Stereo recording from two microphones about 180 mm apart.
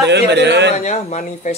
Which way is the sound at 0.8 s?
40° left (ahead or behind).